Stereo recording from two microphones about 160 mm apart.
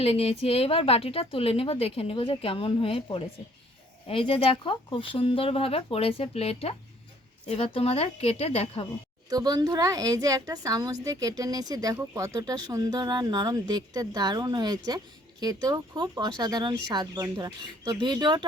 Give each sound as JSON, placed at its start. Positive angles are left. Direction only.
{"t": 0.0, "sound": "a woman's voice", "side_deg": 40}
{"t": 9.3, "sound": "speech", "side_deg": -25}